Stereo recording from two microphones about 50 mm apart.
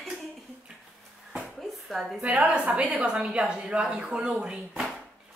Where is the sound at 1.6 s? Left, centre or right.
Centre.